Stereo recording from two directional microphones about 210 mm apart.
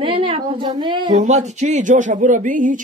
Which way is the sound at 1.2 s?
35° right (ahead or behind).